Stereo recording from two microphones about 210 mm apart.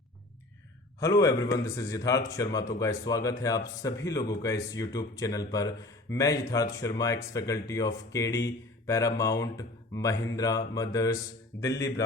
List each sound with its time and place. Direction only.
0.9 s a man's voice: 15° left (ahead or behind)